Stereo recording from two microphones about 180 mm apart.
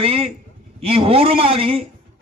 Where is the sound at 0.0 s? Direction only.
35° right (ahead or behind).